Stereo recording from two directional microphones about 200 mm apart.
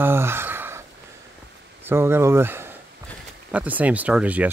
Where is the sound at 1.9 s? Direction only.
10° right (ahead or behind).